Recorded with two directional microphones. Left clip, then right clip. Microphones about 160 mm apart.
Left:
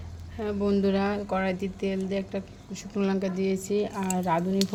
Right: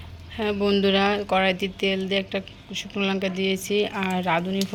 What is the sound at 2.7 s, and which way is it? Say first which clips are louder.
Speech: right 3 dB; 20° left (ahead or behind).